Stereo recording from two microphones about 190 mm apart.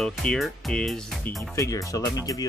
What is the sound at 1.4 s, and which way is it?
Speech, 15° left (ahead or behind).